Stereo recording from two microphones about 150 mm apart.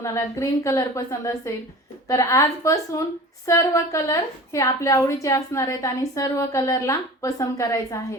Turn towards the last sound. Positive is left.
turn(degrees=20)  # may be behind; listen again after turning